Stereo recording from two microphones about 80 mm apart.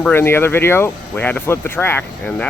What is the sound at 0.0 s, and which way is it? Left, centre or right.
Speech, left.